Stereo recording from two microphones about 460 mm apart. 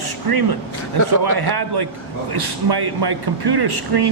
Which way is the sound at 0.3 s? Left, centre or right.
Right.